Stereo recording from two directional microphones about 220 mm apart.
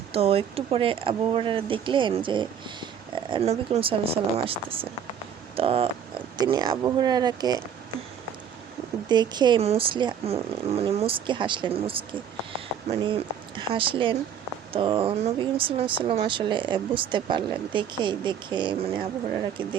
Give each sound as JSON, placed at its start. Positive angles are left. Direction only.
{"t": 0.1, "sound": "speech", "side_deg": -25}
{"t": 9.0, "sound": "speech", "side_deg": -20}